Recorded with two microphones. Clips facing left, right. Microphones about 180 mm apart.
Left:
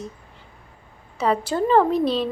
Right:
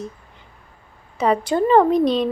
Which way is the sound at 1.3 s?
10° right (ahead or behind).